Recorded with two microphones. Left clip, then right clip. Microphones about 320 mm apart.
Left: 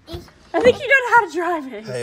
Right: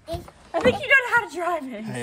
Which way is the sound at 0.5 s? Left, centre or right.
Left.